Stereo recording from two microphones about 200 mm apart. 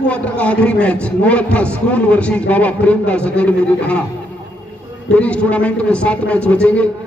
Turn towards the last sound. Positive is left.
turn(degrees=5)  # may be behind; listen again after turning